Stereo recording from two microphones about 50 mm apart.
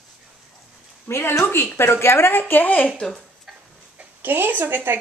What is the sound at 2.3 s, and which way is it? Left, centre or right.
Speech, left.